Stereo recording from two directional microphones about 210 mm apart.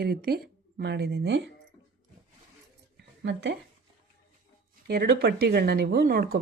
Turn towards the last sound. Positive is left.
turn(degrees=-45)  # may be behind; listen again after turning